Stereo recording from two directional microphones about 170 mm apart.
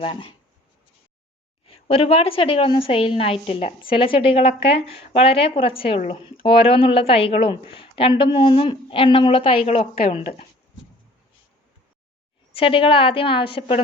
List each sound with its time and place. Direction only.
0.0 s a woman's voice: 30° left (ahead or behind)
1.6 s a woman's voice: 35° left (ahead or behind)
12.5 s a woman's voice: 30° left (ahead or behind)